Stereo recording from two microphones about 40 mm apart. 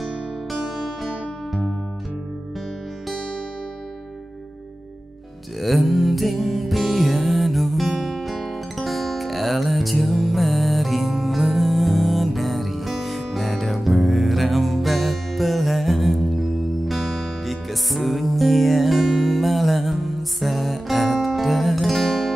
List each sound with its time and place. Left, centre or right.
0.0 s guitar: centre
0.8 s music: centre
5.6 s music: centre